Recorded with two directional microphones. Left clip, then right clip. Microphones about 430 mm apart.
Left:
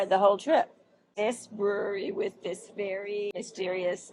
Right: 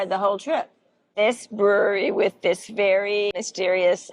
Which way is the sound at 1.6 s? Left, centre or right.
Right.